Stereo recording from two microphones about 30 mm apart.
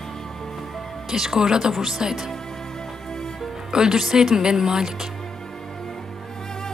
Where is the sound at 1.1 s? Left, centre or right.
Centre.